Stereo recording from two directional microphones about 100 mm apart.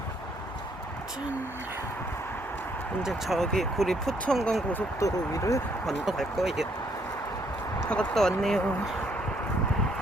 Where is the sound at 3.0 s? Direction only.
Centre (ahead or behind).